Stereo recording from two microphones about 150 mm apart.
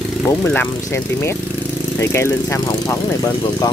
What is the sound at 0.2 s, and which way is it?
Speech, 15° left (ahead or behind).